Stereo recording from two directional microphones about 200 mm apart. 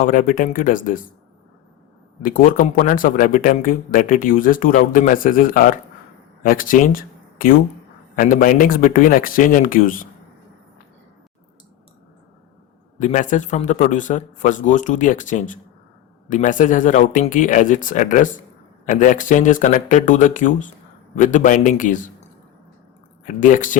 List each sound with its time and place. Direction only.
0.0 s speech: 40° left (ahead or behind)
2.2 s speech: 45° left (ahead or behind)
13.0 s a man's voice: 40° left (ahead or behind)
23.2 s a man's voice: 40° left (ahead or behind)